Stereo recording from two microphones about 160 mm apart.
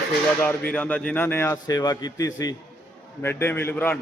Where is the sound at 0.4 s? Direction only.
10° left (ahead or behind).